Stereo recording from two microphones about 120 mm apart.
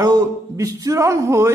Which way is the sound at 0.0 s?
30° right (ahead or behind).